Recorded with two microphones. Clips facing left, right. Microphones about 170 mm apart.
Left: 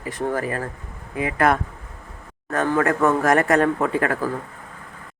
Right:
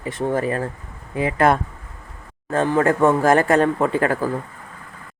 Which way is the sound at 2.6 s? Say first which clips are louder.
Right 2 dB; 25° right (ahead or behind).